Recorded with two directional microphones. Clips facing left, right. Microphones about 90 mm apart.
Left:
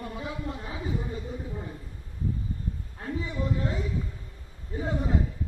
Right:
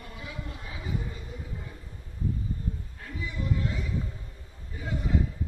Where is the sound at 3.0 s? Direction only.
30° left (ahead or behind).